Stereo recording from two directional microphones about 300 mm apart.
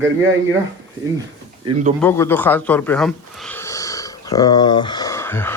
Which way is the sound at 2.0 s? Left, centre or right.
Centre.